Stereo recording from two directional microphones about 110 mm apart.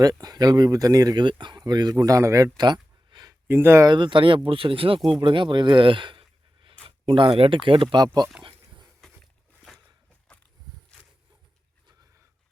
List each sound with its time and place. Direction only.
0.0 s speech: 35° right (ahead or behind)
1.2 s speech: 45° right (ahead or behind)
3.4 s speech: 20° right (ahead or behind)
3.8 s speech: 45° right (ahead or behind)
9.6 s a sound: centre (ahead or behind)
10.9 s a sound: 5° left (ahead or behind)